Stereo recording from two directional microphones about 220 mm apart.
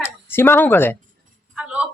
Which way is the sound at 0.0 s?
10° left (ahead or behind).